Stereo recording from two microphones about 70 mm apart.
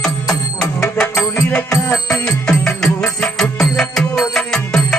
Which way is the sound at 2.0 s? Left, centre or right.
Centre.